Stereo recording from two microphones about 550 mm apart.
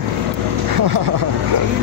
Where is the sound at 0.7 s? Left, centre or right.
Right.